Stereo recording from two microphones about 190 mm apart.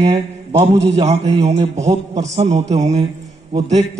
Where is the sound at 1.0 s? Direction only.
35° right (ahead or behind).